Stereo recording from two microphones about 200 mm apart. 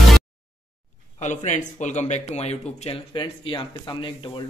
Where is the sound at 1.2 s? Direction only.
35° left (ahead or behind).